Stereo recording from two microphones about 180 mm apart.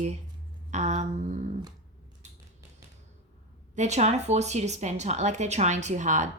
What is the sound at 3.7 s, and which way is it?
Speech, 40° right (ahead or behind).